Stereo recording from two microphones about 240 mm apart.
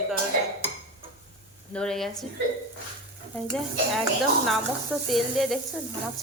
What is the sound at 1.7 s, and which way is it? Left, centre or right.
Speech, centre.